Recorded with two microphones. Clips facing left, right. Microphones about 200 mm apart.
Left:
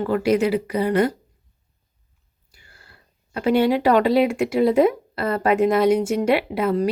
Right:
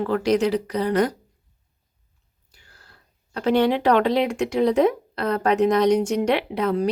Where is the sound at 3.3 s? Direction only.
10° left (ahead or behind).